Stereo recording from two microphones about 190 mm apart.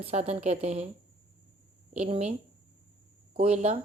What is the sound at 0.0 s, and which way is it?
Speech, 35° right (ahead or behind).